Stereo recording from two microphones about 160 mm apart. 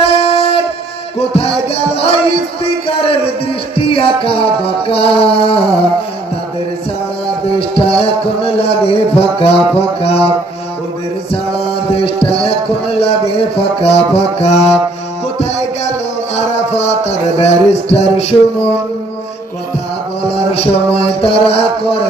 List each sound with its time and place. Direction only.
0.1 s a sound: 40° left (ahead or behind)
1.3 s music: 40° left (ahead or behind)
7.8 s music: 35° left (ahead or behind)
11.9 s speech: 35° left (ahead or behind)
15.4 s music: 45° left (ahead or behind)
20.5 s music: 35° left (ahead or behind)